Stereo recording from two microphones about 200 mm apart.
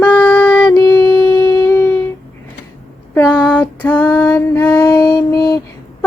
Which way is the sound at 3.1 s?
10° left (ahead or behind).